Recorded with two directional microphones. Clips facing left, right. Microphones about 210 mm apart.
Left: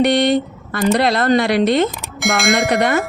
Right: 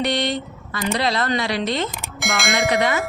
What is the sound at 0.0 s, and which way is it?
A woman's voice, 60° left (ahead or behind).